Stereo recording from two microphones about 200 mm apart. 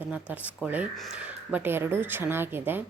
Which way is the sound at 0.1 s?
5° right (ahead or behind).